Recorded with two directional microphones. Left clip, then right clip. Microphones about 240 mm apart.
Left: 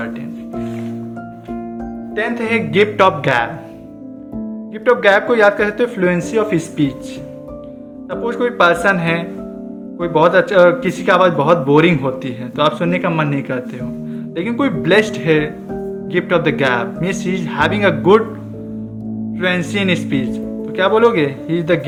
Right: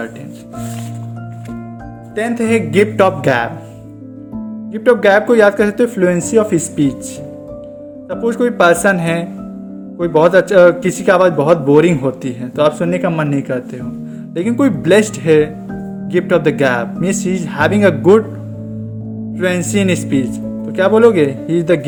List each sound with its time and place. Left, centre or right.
2.1 s a man's voice: right
4.7 s a man's voice: right
8.1 s a man's voice: right
19.4 s a man's voice: right